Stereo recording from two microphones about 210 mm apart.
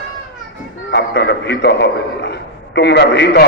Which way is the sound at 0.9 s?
50° left (ahead or behind).